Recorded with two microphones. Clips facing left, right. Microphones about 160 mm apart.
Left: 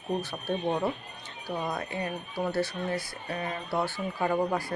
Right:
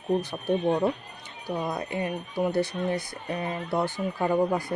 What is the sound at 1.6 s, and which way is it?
Speech, 15° right (ahead or behind).